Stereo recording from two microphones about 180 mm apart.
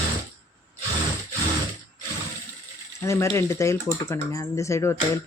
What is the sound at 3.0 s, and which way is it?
Speech, 15° left (ahead or behind).